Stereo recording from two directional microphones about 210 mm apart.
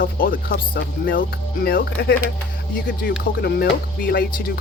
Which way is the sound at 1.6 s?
50° left (ahead or behind).